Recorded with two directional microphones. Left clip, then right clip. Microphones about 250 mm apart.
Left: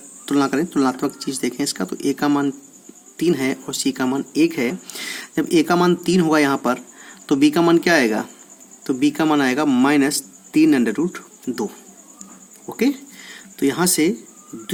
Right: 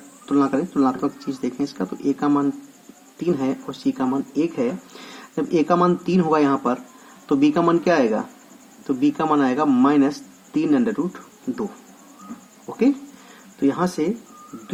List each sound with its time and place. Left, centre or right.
0.3 s speech: left
12.6 s speech: left